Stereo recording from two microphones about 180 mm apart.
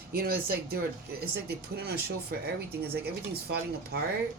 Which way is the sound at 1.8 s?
60° right (ahead or behind).